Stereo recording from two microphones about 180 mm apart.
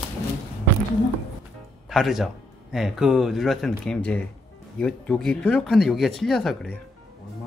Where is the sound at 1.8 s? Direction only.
Centre (ahead or behind).